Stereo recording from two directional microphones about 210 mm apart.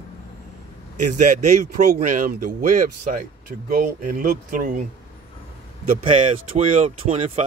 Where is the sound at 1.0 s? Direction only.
35° right (ahead or behind).